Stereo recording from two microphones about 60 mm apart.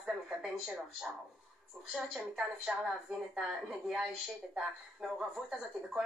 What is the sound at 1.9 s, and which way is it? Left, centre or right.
Speech, centre.